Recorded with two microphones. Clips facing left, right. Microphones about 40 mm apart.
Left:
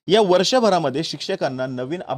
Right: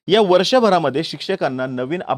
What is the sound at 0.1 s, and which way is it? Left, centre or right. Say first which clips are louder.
Speech: right 2 dB; centre.